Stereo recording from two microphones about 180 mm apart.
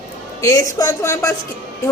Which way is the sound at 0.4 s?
20° left (ahead or behind).